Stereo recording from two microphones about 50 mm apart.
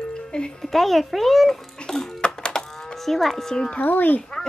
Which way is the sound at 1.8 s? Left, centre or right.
Centre.